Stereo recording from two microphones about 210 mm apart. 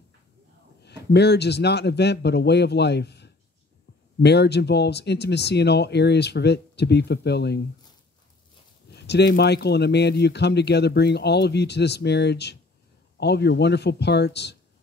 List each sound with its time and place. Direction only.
0.8 s speech: 55° left (ahead or behind)
8.9 s speech: 50° left (ahead or behind)